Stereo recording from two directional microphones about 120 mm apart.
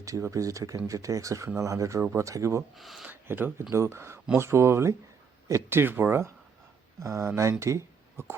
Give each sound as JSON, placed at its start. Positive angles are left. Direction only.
{"t": 0.0, "sound": "speech", "side_deg": -25}
{"t": 2.7, "sound": "speech", "side_deg": 0}
{"t": 3.1, "sound": "speech", "side_deg": -15}